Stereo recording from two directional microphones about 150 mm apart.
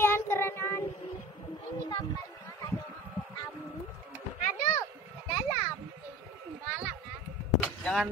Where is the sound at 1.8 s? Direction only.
25° left (ahead or behind).